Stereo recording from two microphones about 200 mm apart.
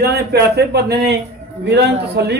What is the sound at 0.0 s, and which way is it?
A man's voice, 50° right (ahead or behind).